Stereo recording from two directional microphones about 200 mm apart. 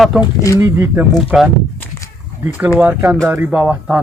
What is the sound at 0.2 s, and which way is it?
Speech, 15° left (ahead or behind).